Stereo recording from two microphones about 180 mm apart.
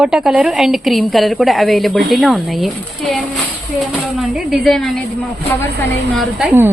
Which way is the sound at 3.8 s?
Centre (ahead or behind).